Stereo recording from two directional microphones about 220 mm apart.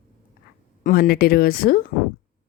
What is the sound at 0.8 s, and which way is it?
A woman's voice, 45° left (ahead or behind).